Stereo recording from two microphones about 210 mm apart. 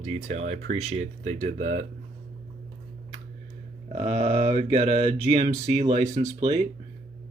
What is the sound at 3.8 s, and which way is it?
Speech, 30° right (ahead or behind).